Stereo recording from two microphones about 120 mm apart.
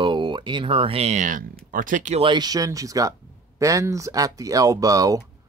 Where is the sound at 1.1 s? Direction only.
90° right.